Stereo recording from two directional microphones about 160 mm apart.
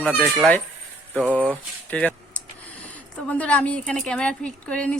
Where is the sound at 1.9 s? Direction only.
10° left (ahead or behind).